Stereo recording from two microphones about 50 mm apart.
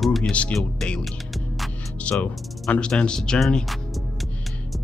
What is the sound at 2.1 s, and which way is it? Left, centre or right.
Speech, left.